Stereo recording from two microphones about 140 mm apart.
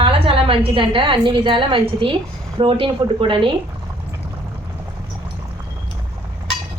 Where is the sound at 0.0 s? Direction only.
40° right (ahead or behind).